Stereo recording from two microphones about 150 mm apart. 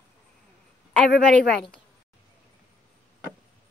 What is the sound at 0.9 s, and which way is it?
Speech, 5° left (ahead or behind).